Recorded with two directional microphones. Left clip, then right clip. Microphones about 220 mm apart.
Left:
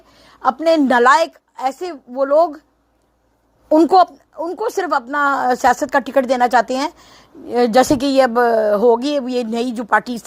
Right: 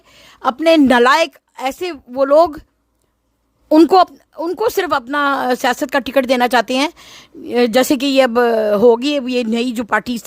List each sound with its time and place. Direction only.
0.1 s a sound: 40° right (ahead or behind)
0.9 s a woman's voice: 35° right (ahead or behind)
3.7 s a woman's voice: 45° right (ahead or behind)